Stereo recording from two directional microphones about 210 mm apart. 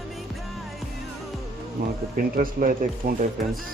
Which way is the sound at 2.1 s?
40° right (ahead or behind).